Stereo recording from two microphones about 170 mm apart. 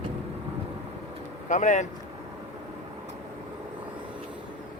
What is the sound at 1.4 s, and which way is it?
Speech, 45° left (ahead or behind).